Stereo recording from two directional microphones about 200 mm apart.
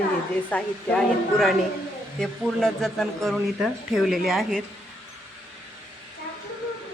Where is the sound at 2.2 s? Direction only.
Centre (ahead or behind).